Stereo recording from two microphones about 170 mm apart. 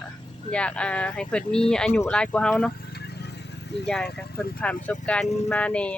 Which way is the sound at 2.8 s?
70° left (ahead or behind).